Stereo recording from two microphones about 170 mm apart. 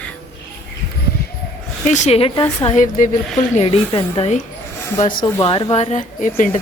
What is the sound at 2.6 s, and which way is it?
Speech, 45° left (ahead or behind).